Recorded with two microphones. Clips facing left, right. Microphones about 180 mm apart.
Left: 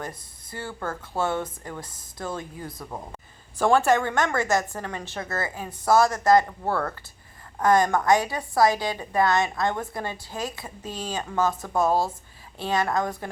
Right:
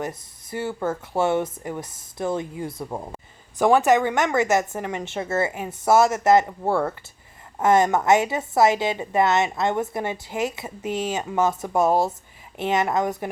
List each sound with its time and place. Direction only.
0.0 s a woman's voice: 25° right (ahead or behind)